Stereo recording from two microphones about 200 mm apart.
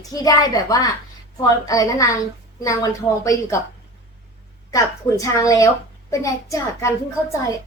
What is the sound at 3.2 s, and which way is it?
Speech, 15° left (ahead or behind).